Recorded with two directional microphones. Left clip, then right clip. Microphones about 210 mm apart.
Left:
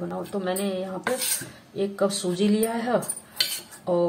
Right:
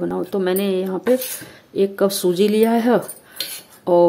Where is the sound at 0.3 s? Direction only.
50° right (ahead or behind).